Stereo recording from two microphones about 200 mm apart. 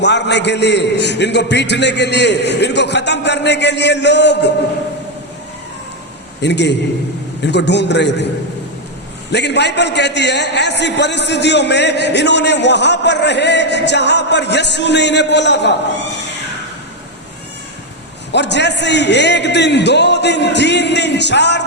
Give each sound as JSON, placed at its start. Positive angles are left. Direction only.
{"t": 0.0, "sound": "a man's voice", "side_deg": 60}
{"t": 6.4, "sound": "a man's voice", "side_deg": 60}
{"t": 9.3, "sound": "a man's voice", "side_deg": 60}
{"t": 18.3, "sound": "a man's voice", "side_deg": 60}